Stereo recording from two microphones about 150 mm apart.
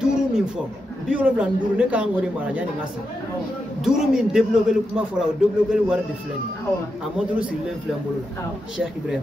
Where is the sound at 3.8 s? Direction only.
5° right (ahead or behind).